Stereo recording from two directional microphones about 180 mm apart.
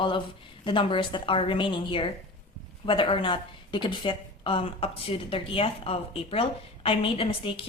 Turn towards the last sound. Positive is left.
turn(degrees=30)  # may be behind; listen again after turning